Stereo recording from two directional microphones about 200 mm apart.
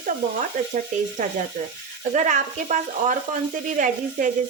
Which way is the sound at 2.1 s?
35° right (ahead or behind).